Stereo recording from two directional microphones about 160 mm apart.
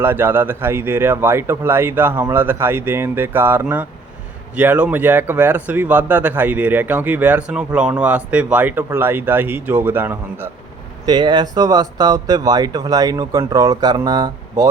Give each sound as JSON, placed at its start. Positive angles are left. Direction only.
{"t": 0.0, "sound": "speech", "side_deg": -15}
{"t": 11.0, "sound": "speech", "side_deg": -30}